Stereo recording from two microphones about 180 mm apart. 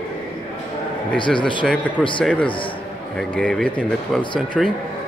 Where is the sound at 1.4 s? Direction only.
5° left (ahead or behind).